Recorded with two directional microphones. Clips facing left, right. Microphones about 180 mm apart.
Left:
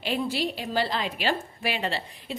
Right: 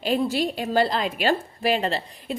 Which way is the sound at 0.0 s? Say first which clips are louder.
Right 5 dB; 45° right (ahead or behind).